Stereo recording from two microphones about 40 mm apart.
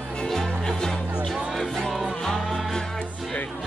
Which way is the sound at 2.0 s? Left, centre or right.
Centre.